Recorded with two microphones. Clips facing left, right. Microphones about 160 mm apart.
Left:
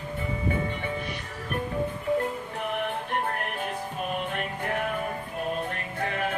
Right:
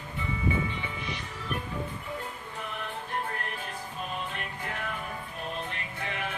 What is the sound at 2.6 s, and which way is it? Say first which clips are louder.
Music: left 7 dB; 65° left (ahead or behind).